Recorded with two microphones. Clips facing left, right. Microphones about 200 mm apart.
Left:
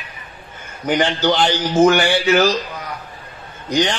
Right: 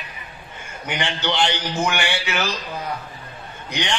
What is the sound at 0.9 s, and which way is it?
Speech, 35° left (ahead or behind).